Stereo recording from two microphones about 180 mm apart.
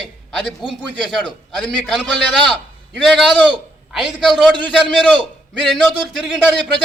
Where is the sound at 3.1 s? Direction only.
5° left (ahead or behind).